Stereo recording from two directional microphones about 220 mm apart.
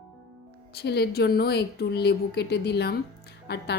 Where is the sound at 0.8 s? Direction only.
50° left (ahead or behind).